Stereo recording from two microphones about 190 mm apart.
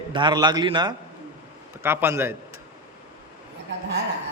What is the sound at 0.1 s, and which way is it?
Speech, 25° right (ahead or behind).